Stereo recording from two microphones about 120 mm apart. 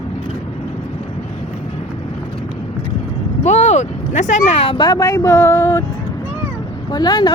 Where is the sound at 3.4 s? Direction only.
70° left (ahead or behind); by 4.6 s 90° left.